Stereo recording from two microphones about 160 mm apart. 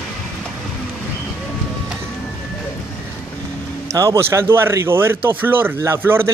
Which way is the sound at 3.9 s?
20° right (ahead or behind).